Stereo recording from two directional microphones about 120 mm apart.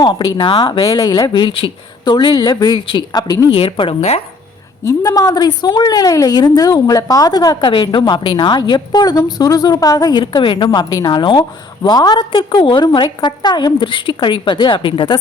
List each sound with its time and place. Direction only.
0.0 s a woman's voice: 40° left (ahead or behind)
3.5 s a woman's voice: 45° left (ahead or behind)
4.9 s a woman's voice: 30° left (ahead or behind)